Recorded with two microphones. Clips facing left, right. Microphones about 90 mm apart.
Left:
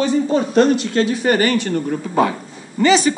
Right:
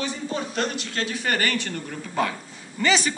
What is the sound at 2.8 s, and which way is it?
Speech, 5° left (ahead or behind).